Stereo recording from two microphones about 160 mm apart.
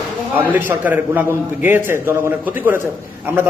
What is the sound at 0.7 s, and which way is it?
A man's voice, 10° right (ahead or behind).